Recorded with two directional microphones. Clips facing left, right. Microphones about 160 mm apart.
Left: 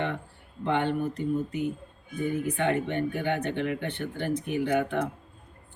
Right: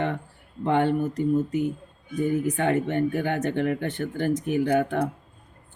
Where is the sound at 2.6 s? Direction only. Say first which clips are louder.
Right 3 dB; 45° right (ahead or behind).